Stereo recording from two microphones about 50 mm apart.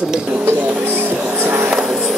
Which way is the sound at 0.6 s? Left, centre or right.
Right.